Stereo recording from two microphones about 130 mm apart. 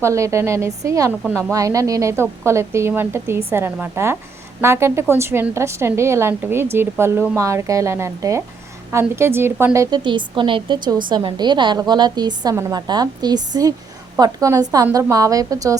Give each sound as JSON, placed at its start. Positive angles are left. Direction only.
{"t": 0.0, "sound": "a woman's voice", "side_deg": -25}
{"t": 10.0, "sound": "a woman's voice", "side_deg": -40}